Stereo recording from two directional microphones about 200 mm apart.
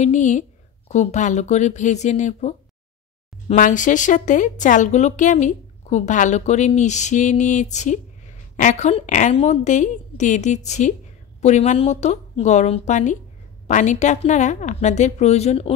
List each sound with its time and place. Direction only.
0.0 s speech: 35° left (ahead or behind)